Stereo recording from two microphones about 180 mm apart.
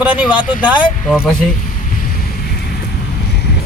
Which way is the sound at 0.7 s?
Centre (ahead or behind).